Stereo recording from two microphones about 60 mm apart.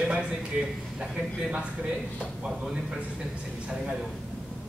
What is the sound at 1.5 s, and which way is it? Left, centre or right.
Speech, centre.